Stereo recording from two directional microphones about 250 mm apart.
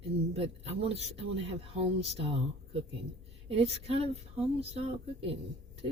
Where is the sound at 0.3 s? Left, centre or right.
Right.